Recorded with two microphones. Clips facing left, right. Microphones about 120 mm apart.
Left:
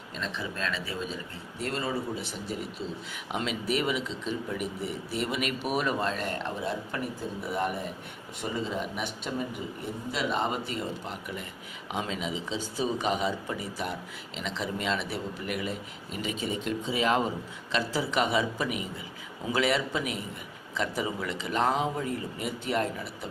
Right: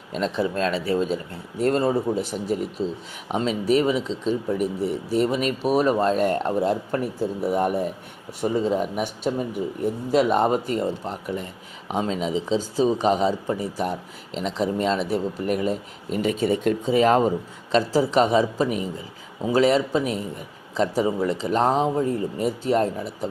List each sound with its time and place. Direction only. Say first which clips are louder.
0.2 s speech: right 11 dB; 35° right (ahead or behind)
1.5 s speech: right 11 dB; 50° right (ahead or behind)